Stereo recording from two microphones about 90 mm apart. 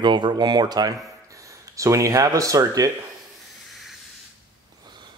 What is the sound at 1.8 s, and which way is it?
Speech, 35° right (ahead or behind).